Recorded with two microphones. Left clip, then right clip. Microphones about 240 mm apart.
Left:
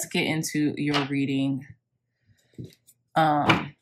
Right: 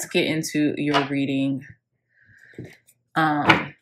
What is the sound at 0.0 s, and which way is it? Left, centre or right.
Speech, centre.